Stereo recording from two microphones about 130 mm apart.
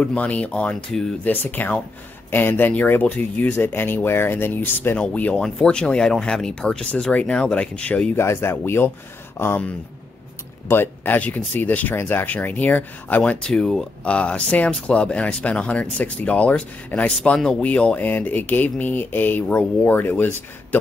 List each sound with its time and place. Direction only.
0.0 s speech: 10° left (ahead or behind)